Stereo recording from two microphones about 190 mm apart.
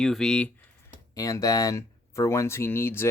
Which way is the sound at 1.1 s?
20° left (ahead or behind).